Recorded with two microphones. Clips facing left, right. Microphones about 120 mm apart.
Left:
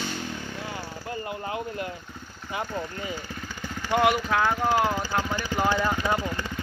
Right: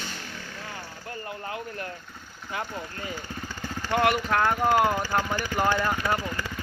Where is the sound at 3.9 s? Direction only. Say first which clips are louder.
Left 1 dB; 5° left (ahead or behind).